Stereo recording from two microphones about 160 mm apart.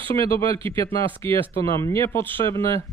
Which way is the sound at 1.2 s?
15° left (ahead or behind).